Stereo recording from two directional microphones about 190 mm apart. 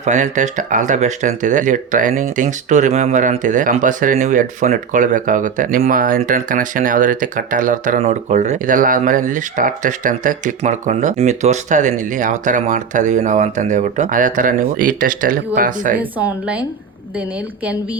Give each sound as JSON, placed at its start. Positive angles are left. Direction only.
{"t": 0.0, "sound": "speech", "side_deg": -40}
{"t": 16.0, "sound": "speech", "side_deg": -10}